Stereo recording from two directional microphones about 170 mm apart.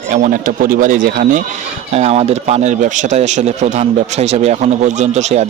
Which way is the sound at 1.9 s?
35° right (ahead or behind).